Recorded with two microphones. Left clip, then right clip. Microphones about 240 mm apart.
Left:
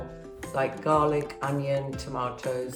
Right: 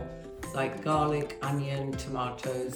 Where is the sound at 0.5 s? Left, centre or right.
Centre.